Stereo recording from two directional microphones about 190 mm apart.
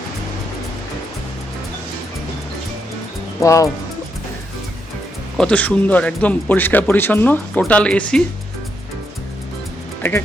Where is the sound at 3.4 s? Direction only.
15° left (ahead or behind).